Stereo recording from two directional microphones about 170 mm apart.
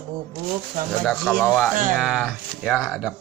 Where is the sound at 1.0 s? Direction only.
Centre (ahead or behind).